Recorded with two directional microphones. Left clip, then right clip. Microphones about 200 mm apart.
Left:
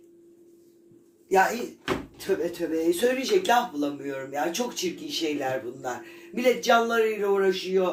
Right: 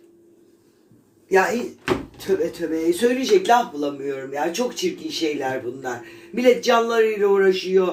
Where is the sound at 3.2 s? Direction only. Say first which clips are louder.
Right 6 dB; 10° left (ahead or behind).